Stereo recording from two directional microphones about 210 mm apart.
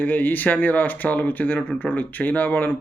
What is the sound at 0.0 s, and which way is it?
Speech, 10° left (ahead or behind).